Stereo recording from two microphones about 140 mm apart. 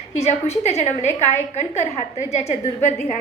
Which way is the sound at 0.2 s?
50° left (ahead or behind).